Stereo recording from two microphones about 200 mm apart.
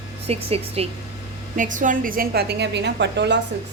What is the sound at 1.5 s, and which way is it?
A woman's voice, 40° right (ahead or behind).